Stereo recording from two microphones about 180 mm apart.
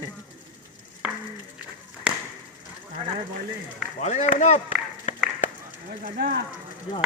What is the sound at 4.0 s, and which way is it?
A man's voice, 40° left (ahead or behind).